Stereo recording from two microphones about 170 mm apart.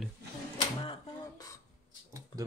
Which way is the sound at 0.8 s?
30° left (ahead or behind).